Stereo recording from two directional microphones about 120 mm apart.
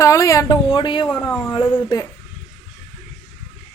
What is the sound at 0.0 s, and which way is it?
Speech, 25° left (ahead or behind).